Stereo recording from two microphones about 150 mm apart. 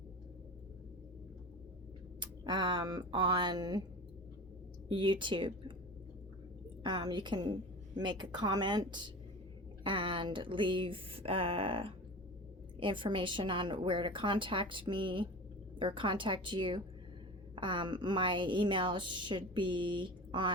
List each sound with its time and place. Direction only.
2.2 s a woman's voice: 30° right (ahead or behind)
4.9 s a woman's voice: 35° right (ahead or behind)
6.8 s a woman's voice: 30° right (ahead or behind)